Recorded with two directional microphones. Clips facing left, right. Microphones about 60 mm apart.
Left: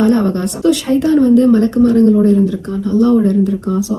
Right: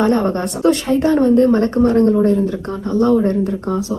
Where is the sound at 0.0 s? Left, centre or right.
Right.